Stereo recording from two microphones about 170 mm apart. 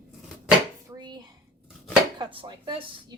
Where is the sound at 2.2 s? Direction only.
30° right (ahead or behind).